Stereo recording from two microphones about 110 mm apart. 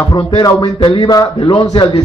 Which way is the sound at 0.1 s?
40° left (ahead or behind).